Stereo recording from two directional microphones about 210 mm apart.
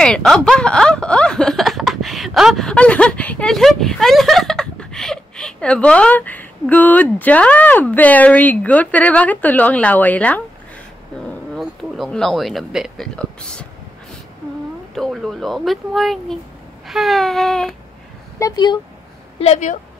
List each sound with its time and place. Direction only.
0.0 s speech: 5° left (ahead or behind)
11.5 s speech: centre (ahead or behind)
15.0 s speech: centre (ahead or behind)
18.4 s speech: 20° left (ahead or behind)
19.4 s speech: 35° left (ahead or behind)